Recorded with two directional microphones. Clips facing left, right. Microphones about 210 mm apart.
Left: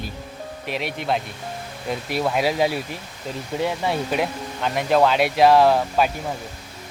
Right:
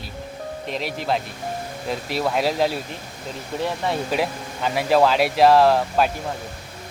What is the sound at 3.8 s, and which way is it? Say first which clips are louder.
Speech: even; centre (ahead or behind).